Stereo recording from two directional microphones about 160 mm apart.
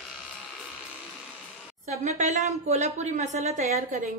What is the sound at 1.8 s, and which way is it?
Speech, 50° right (ahead or behind).